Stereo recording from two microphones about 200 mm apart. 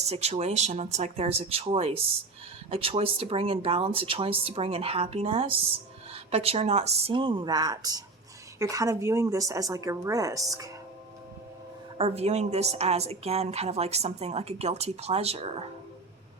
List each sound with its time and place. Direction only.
0.0 s a woman's voice: 30° right (ahead or behind); by 10.4 s 15° right (ahead or behind)
11.9 s a woman's voice: 30° right (ahead or behind)